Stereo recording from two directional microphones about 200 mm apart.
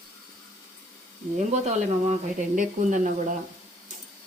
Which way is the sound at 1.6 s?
35° right (ahead or behind).